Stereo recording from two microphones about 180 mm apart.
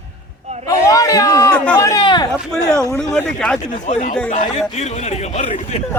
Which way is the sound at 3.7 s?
40° left (ahead or behind).